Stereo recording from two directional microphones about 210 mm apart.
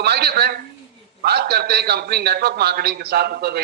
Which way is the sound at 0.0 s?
50° right (ahead or behind).